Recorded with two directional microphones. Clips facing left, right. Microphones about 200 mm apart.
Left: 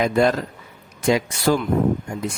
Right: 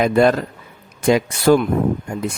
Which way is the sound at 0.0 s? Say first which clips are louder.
Right 4 dB; 60° right (ahead or behind).